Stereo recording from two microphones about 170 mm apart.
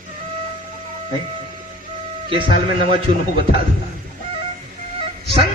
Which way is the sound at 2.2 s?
30° right (ahead or behind).